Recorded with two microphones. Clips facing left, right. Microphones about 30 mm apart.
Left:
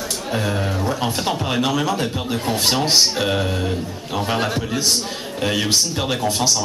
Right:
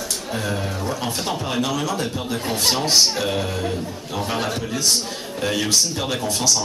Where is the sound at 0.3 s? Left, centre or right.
Centre.